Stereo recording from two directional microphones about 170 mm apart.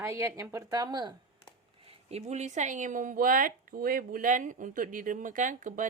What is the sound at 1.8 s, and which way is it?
Speech, 40° right (ahead or behind).